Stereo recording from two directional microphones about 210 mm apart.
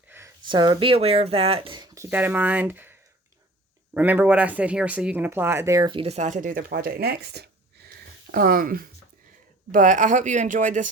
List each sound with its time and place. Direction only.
0.4 s speech: 20° right (ahead or behind)
2.0 s speech: 10° right (ahead or behind)
3.9 s speech: 10° right (ahead or behind); by 10.8 s 40° right (ahead or behind)